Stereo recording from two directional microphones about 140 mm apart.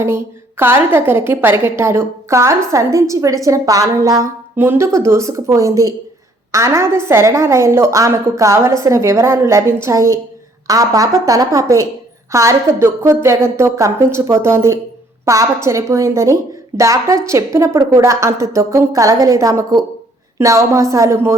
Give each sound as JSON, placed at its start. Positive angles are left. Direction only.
{"t": 0.0, "sound": "a woman's voice", "side_deg": -15}